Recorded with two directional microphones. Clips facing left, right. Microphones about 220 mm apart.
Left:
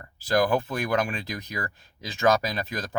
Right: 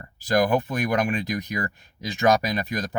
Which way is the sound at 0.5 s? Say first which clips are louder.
Right 2 dB; 15° right (ahead or behind).